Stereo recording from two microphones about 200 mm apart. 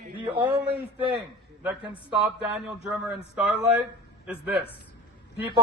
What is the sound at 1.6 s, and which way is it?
Speech, 5° right (ahead or behind).